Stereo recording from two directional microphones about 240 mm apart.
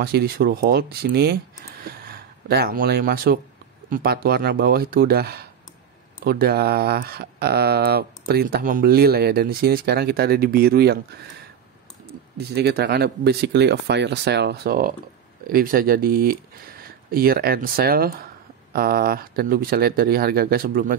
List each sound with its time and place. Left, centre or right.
0.0 s speech: right
12.4 s speech: right